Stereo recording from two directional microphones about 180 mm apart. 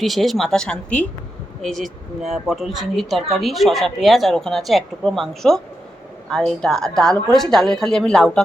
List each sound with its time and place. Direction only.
0.0 s speech: centre (ahead or behind)